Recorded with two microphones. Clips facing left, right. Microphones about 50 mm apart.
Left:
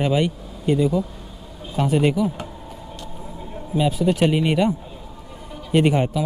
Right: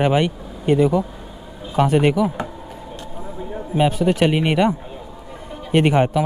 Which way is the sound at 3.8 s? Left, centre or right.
Right.